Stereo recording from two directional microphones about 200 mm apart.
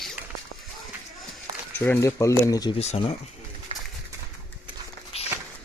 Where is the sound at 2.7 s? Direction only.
30° left (ahead or behind).